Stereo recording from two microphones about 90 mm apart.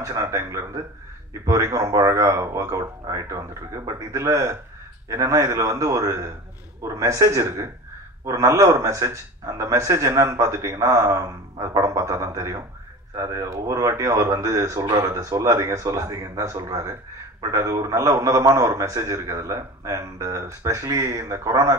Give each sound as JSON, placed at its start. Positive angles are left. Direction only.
{"t": 0.0, "sound": "a man's voice", "side_deg": -35}